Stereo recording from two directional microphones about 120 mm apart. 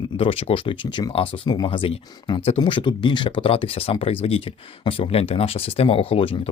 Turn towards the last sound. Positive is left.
turn(degrees=50)  # may be behind; listen again after turning